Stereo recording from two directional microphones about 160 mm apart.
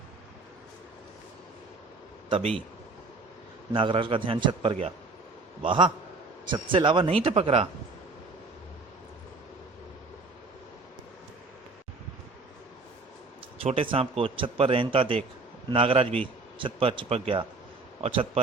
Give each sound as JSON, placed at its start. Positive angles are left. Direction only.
{"t": 2.3, "sound": "a man's voice", "side_deg": -35}
{"t": 3.7, "sound": "a man's voice", "side_deg": -30}
{"t": 13.6, "sound": "a man's voice", "side_deg": -35}